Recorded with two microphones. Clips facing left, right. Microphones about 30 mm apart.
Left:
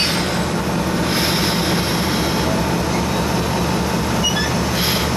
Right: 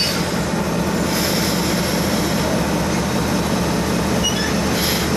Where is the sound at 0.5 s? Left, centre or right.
Centre.